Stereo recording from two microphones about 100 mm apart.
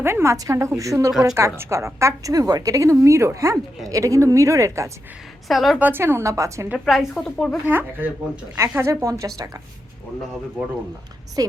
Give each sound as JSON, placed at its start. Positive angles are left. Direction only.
{"t": 0.0, "sound": "a woman's voice", "side_deg": -25}
{"t": 5.5, "sound": "speech", "side_deg": 0}
{"t": 5.8, "sound": "a woman's voice", "side_deg": -20}
{"t": 6.7, "sound": "speech", "side_deg": 0}
{"t": 7.7, "sound": "a woman's voice", "side_deg": -20}
{"t": 11.4, "sound": "a woman's voice", "side_deg": -40}